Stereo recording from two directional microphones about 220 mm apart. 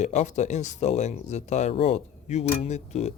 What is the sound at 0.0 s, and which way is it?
Speech, 30° left (ahead or behind).